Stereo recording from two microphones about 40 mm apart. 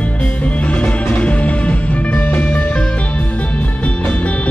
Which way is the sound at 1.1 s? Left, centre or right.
Left.